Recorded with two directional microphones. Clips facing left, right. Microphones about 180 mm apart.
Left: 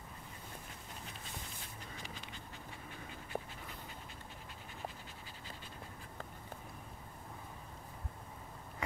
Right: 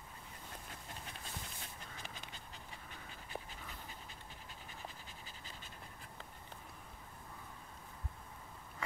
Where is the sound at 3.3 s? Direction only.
40° left (ahead or behind).